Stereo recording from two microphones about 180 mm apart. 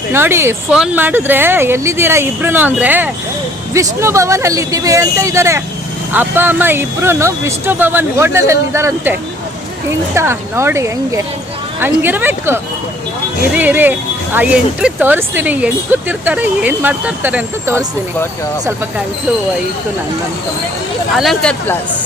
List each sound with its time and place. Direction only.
0.1 s speech: 15° right (ahead or behind)
10.2 s speech: 15° right (ahead or behind)
21.2 s speech: centre (ahead or behind)